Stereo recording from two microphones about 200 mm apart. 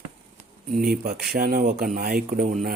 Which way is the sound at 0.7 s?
50° right (ahead or behind).